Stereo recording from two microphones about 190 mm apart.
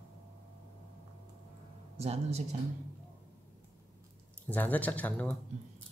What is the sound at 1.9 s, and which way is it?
Speech, 35° right (ahead or behind).